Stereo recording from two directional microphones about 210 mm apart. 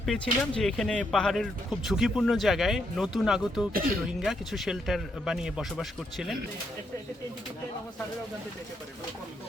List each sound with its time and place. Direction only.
0.0 s speech: centre (ahead or behind)
3.7 s speech: 45° right (ahead or behind)
4.2 s speech: centre (ahead or behind)